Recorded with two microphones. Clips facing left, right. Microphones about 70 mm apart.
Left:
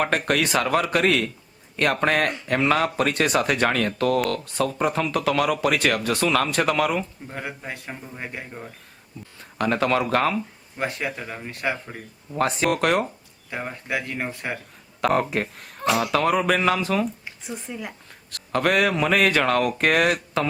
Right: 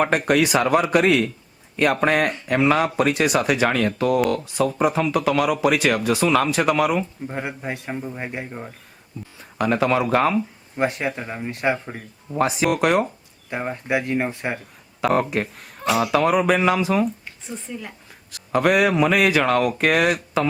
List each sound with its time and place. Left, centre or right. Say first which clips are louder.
0.0 s a man's voice: right 4 dB; centre
7.3 s a man's voice: right 5 dB; centre
9.4 s speech: right 2 dB; centre
10.8 s speech: right 5 dB; right
12.4 s speech: right 2 dB; centre
13.5 s speech: right 5 dB; centre
15.0 s speech: right 1 dB; centre
17.4 s a woman's voice: even; centre
18.3 s speech: right 3 dB; centre